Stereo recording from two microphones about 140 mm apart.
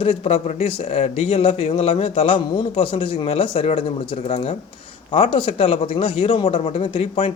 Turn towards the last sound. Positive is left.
turn(degrees=40)  # may be behind; listen again after turning